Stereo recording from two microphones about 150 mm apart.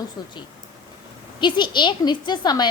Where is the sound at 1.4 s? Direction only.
30° left (ahead or behind).